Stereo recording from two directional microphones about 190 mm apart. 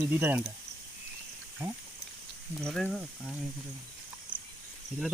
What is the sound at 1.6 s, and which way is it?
Speech, 10° right (ahead or behind).